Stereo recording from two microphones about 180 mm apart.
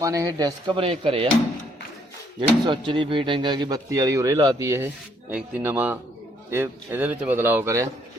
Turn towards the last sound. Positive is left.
turn(degrees=-15)  # may be behind; listen again after turning